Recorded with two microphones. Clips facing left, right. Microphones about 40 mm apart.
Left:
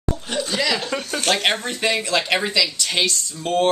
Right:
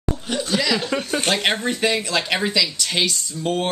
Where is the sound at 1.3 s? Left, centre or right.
Centre.